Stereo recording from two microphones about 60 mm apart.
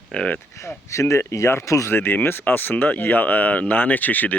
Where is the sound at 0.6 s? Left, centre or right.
Left.